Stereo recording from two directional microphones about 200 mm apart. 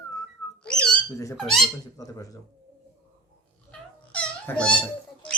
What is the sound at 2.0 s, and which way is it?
Speech, 15° left (ahead or behind).